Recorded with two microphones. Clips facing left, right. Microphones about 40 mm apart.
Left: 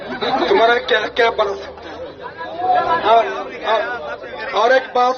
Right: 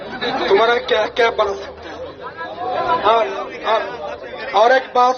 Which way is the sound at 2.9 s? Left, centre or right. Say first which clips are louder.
Even; centre.